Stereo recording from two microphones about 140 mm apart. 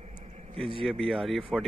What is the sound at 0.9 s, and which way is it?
Speech, centre (ahead or behind).